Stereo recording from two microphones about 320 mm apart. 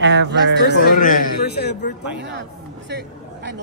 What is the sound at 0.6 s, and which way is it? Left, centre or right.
A man's voice, left.